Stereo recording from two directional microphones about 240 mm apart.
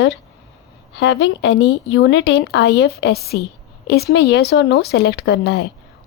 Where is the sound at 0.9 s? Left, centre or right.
Left.